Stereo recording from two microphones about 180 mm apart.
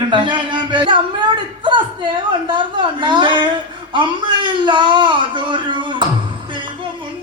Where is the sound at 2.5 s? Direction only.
25° right (ahead or behind).